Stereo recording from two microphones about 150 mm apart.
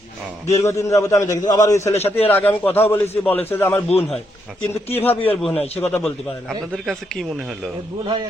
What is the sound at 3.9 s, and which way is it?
Speech, 45° left (ahead or behind).